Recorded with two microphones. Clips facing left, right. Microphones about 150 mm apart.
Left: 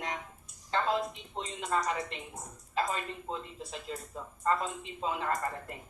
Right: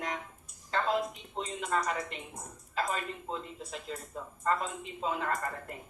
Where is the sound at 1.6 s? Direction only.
30° left (ahead or behind).